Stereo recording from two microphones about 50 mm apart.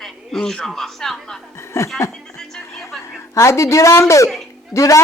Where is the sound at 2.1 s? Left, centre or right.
Centre.